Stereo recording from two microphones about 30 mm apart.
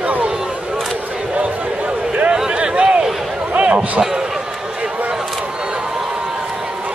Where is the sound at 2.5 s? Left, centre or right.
Right.